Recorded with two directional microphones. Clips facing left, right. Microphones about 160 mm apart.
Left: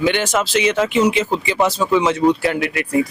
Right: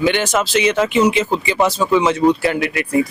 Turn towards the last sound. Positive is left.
turn(degrees=-15)  # may be behind; listen again after turning